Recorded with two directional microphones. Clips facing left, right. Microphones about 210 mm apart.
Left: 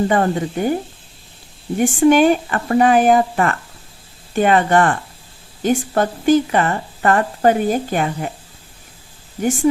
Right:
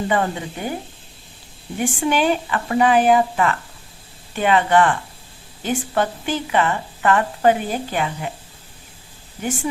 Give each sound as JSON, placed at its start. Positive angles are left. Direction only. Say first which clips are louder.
{"t": 0.1, "sound": "a woman's voice", "louder": "left 4 dB", "side_deg": 45}
{"t": 1.8, "sound": "a woman's voice", "louder": "left 8 dB", "side_deg": 45}